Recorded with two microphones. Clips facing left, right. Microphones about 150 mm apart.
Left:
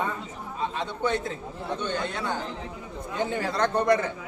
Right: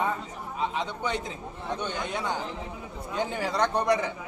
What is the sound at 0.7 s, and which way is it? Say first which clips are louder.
A man's voice: left 3 dB; 15° right (ahead or behind).